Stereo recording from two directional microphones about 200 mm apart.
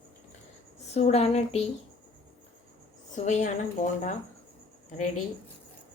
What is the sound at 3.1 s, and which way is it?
A woman's voice, 35° left (ahead or behind).